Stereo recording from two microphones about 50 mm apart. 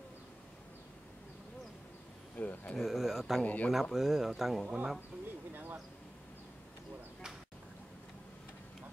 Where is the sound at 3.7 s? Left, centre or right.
Centre.